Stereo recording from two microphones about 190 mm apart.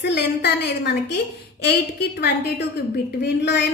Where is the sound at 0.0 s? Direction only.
60° left (ahead or behind).